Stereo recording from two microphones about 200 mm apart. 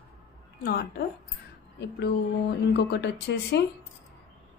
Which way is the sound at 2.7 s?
60° left (ahead or behind).